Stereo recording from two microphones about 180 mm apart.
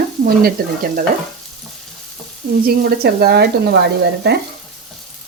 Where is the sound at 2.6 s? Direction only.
60° right (ahead or behind).